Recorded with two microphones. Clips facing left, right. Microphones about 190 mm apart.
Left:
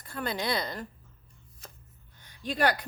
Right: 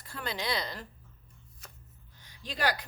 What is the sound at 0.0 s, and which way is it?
Speech, 50° left (ahead or behind).